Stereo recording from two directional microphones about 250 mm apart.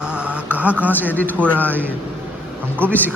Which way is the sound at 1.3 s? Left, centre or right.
Centre.